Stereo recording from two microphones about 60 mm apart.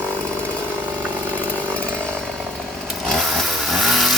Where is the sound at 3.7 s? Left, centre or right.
Centre.